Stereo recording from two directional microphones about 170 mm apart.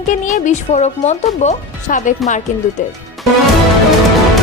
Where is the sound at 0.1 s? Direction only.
50° left (ahead or behind).